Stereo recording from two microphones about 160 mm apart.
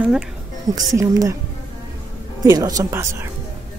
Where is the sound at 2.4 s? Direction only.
25° right (ahead or behind).